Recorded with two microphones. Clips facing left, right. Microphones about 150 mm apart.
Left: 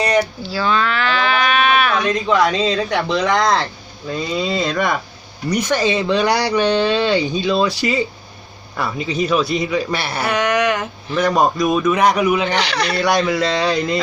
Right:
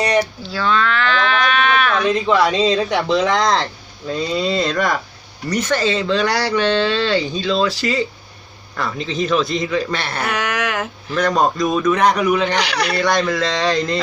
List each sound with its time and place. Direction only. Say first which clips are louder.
0.0 s livestock: even; centre (ahead or behind)
2.9 s speech: right 1 dB; centre (ahead or behind)
10.3 s speech: left 7 dB; 5° right (ahead or behind)
11.2 s speech: left 1 dB; 10° left (ahead or behind)
12.5 s speech: even; 10° right (ahead or behind)
12.9 s speech: left 2 dB; 5° left (ahead or behind)